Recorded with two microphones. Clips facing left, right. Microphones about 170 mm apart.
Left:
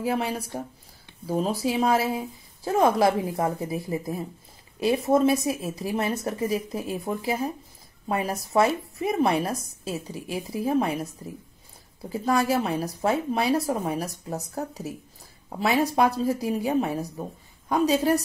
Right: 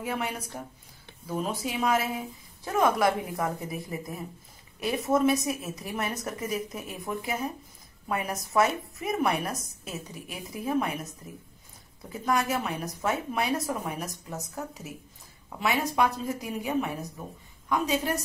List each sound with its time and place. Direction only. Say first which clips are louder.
0.0 s a woman's voice: left 6 dB; 30° left (ahead or behind)